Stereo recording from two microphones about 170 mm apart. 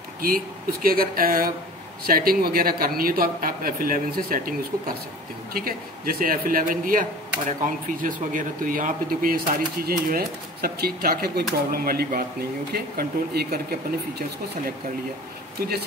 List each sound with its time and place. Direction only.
0.2 s speech: 60° right (ahead or behind)